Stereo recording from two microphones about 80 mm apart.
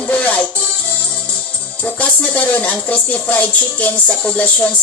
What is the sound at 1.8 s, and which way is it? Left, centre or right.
Speech, centre.